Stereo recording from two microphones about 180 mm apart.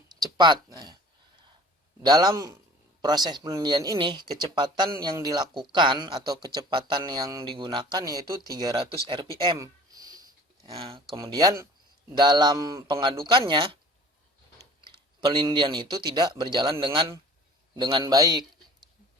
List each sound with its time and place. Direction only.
0.2 s speech: 25° right (ahead or behind)
2.0 s speech: 20° right (ahead or behind)
9.0 s a sound: 25° right (ahead or behind)
10.8 s speech: 30° right (ahead or behind)
11.2 s speech: 20° right (ahead or behind)
14.8 s a man's voice: 25° right (ahead or behind)